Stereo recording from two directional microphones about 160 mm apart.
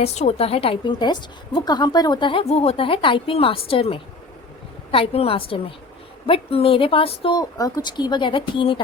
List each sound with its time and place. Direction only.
0.0 s a woman's voice: 45° left (ahead or behind)